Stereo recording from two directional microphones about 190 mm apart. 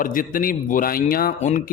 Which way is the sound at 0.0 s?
45° left (ahead or behind).